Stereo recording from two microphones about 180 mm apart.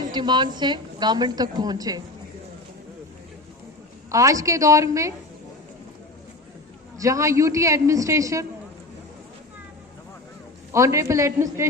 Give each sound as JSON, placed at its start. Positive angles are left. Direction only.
{"t": 0.1, "sound": "a woman's voice", "side_deg": -25}
{"t": 4.1, "sound": "a man's voice", "side_deg": -20}
{"t": 6.9, "sound": "a man's voice", "side_deg": -20}
{"t": 10.7, "sound": "a man's voice", "side_deg": -15}